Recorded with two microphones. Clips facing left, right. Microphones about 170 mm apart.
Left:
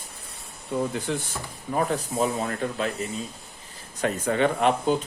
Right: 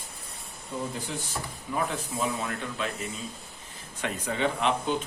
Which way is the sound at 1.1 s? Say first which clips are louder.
Left 7 dB; 60° left (ahead or behind).